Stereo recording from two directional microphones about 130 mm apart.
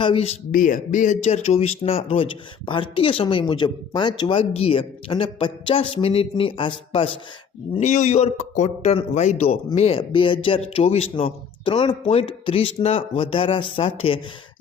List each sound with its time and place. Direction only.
0.0 s speech: 45° left (ahead or behind)
0.5 s speech: 85° left; by 7.2 s 45° left (ahead or behind)
7.8 s speech: 65° left (ahead or behind); by 13.9 s 45° left (ahead or behind)